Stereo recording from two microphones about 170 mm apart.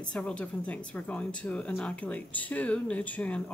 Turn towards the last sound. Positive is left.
turn(degrees=10)  # may be behind; listen again after turning